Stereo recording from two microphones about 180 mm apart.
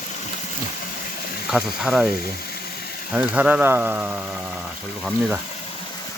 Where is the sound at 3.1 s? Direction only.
5° right (ahead or behind).